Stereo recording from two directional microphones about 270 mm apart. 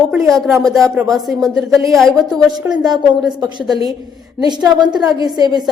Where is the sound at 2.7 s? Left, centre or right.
Centre.